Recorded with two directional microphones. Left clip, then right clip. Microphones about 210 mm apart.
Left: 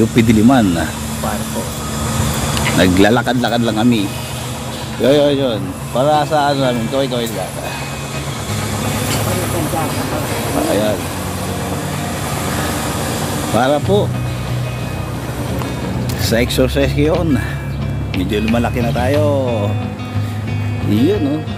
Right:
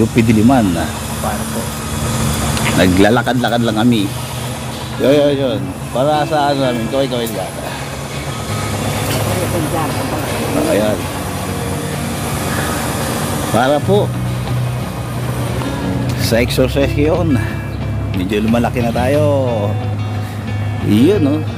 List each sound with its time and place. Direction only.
0.1 s speech: 10° left (ahead or behind)
2.7 s speech: 5° left (ahead or behind)
5.0 s speech: 25° left (ahead or behind)
7.0 s speech: 15° left (ahead or behind)
13.5 s speech: 5° right (ahead or behind)
16.2 s speech: 5° right (ahead or behind)
18.3 s speech: 20° right (ahead or behind)
20.9 s speech: 40° right (ahead or behind)